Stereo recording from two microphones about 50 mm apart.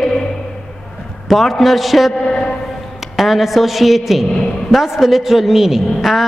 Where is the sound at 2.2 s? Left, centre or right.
Centre.